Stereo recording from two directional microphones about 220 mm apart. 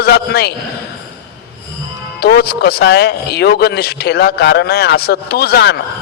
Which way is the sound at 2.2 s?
45° left (ahead or behind).